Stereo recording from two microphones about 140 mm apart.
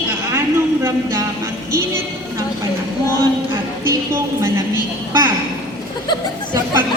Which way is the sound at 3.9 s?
20° right (ahead or behind).